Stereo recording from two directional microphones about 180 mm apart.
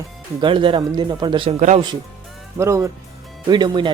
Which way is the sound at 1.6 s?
45° right (ahead or behind).